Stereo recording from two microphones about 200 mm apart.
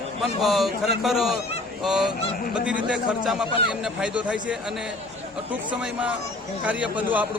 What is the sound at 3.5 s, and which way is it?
Speech, 25° left (ahead or behind).